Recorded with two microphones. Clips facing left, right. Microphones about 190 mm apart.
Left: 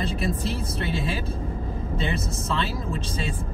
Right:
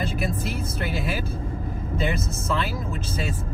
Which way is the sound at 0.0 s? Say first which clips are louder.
Even; 30° left (ahead or behind).